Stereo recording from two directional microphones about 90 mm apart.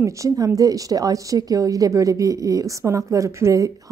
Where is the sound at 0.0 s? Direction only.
35° right (ahead or behind).